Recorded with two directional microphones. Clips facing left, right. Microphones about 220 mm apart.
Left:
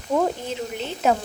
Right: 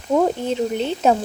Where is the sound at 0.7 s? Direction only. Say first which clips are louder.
Right 2 dB; 30° right (ahead or behind).